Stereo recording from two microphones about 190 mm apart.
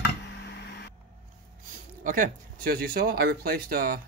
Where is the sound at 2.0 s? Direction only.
45° right (ahead or behind).